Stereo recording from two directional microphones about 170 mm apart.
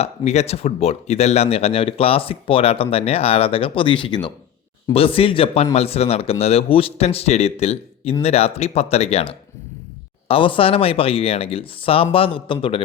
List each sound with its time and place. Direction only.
0.0 s speech: 40° left (ahead or behind)